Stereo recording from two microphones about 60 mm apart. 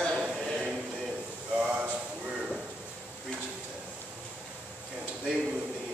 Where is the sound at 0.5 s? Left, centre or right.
Centre.